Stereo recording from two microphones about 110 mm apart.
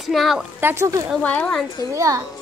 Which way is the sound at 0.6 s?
20° right (ahead or behind).